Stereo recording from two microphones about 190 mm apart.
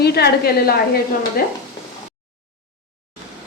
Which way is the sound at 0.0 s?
55° left (ahead or behind).